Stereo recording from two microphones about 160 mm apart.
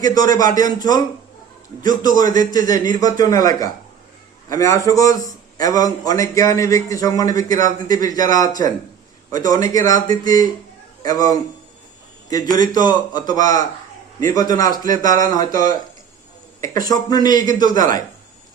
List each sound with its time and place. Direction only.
0.0 s a man's voice: 25° left (ahead or behind)